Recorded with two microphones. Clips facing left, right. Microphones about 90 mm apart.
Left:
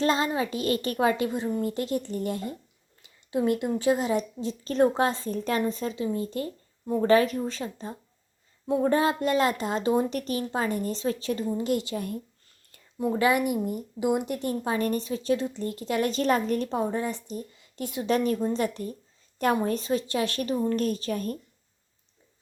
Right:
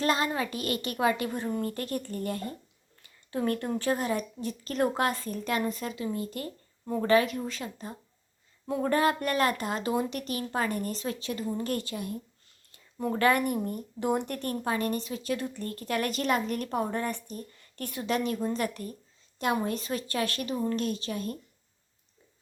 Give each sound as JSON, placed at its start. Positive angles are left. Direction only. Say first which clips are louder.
{"t": 0.0, "sound": "a woman's voice", "louder": "left 3 dB", "side_deg": 30}
{"t": 10.5, "sound": "a woman's voice", "louder": "even", "side_deg": 25}
{"t": 11.5, "sound": "speech", "louder": "left 4 dB", "side_deg": 20}
{"t": 13.0, "sound": "speech", "louder": "left 2 dB", "side_deg": 10}
{"t": 14.8, "sound": "a woman's voice", "louder": "left 4 dB", "side_deg": 35}
{"t": 16.6, "sound": "speech", "louder": "left 2 dB", "side_deg": 20}
{"t": 18.0, "sound": "a woman's voice", "louder": "left 4 dB", "side_deg": 35}
{"t": 19.4, "sound": "a woman's voice", "louder": "left 4 dB", "side_deg": 40}